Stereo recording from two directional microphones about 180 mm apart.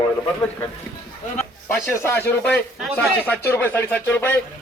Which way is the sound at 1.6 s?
15° left (ahead or behind).